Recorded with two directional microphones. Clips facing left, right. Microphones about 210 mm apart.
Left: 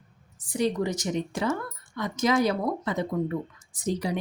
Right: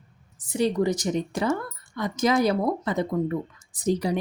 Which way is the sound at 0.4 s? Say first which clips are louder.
Right 3 dB; 30° right (ahead or behind).